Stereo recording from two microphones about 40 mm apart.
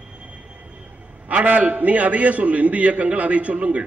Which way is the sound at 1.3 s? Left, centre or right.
Right.